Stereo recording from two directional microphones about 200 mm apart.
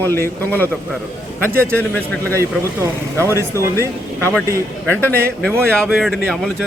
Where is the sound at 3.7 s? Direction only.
15° left (ahead or behind).